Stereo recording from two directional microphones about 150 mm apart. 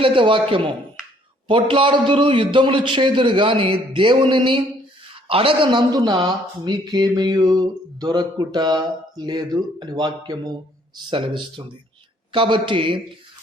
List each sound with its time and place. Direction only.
0.0 s a man's voice: 35° right (ahead or behind)
1.5 s a man's voice: 35° right (ahead or behind)